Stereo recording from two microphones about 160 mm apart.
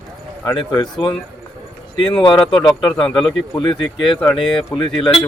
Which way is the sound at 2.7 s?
5° left (ahead or behind).